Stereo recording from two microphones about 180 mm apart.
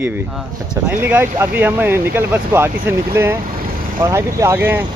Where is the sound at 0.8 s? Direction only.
10° right (ahead or behind).